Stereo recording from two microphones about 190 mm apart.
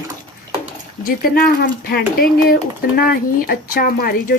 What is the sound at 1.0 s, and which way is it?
Speech, 50° left (ahead or behind).